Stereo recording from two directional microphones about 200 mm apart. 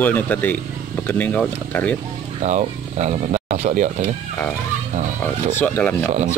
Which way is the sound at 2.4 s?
35° right (ahead or behind).